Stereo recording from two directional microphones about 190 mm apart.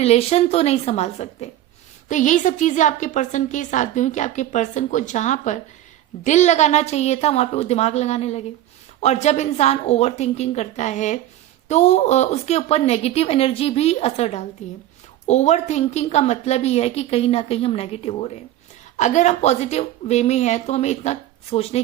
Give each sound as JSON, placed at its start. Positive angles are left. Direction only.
{"t": 0.0, "sound": "a woman's voice", "side_deg": 35}